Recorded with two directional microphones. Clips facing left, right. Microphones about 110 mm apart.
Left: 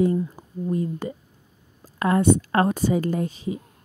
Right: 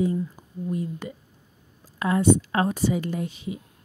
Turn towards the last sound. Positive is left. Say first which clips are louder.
# left 4 dB
turn(degrees=35)  # may be behind; listen again after turning